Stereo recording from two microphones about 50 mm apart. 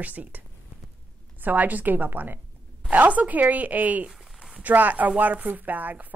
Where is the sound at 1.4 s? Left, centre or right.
Right.